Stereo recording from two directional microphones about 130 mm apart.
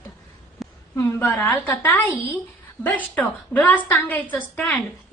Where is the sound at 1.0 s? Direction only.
20° left (ahead or behind).